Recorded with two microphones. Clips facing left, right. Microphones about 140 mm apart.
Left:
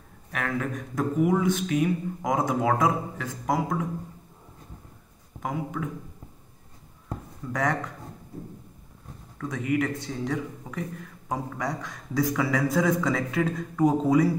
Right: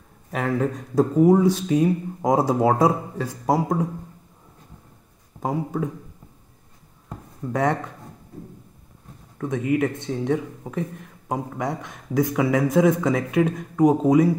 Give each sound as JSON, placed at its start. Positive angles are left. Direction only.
{"t": 0.3, "sound": "speech", "side_deg": -25}
{"t": 5.4, "sound": "a man's voice", "side_deg": -30}
{"t": 7.5, "sound": "a man's voice", "side_deg": -25}
{"t": 9.4, "sound": "a man's voice", "side_deg": -20}